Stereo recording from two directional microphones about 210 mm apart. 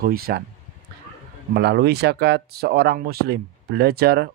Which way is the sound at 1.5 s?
50° right (ahead or behind).